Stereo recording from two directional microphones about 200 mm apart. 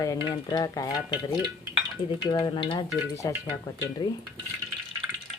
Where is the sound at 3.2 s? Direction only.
15° left (ahead or behind).